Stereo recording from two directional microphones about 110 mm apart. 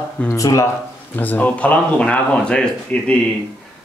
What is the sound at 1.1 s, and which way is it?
A man's voice, 15° left (ahead or behind).